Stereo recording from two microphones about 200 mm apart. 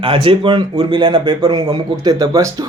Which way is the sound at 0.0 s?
25° right (ahead or behind).